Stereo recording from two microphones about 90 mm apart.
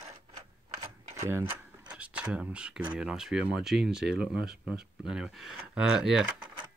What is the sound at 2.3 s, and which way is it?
Speech, 10° right (ahead or behind).